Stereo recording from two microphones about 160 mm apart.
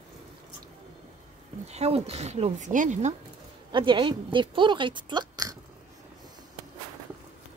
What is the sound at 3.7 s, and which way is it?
A woman's voice, 30° right (ahead or behind).